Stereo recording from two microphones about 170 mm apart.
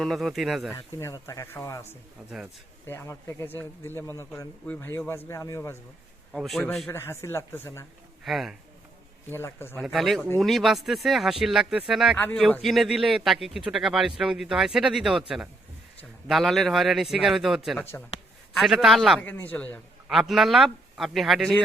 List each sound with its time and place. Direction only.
0.0 s a man's voice: centre (ahead or behind)
0.8 s a man's voice: 20° left (ahead or behind)
6.3 s a man's voice: centre (ahead or behind)
8.2 s a man's voice: centre (ahead or behind)
9.3 s a man's voice: 15° left (ahead or behind)
9.7 s a man's voice: centre (ahead or behind)
12.1 s a man's voice: 10° left (ahead or behind)
16.2 s a man's voice: centre (ahead or behind)
19.2 s a man's voice: 10° left (ahead or behind)
19.7 s a man's voice: centre (ahead or behind)